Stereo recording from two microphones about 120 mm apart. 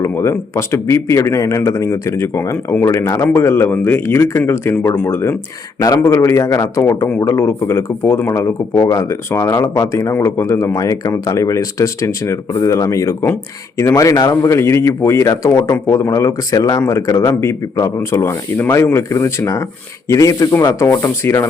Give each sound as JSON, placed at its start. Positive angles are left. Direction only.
{"t": 0.0, "sound": "speech", "side_deg": 20}